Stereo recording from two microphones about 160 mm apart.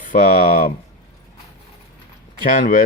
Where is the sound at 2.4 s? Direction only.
55° left (ahead or behind).